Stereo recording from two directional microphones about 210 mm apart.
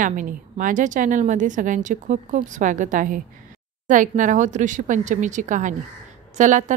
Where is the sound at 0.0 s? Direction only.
40° right (ahead or behind).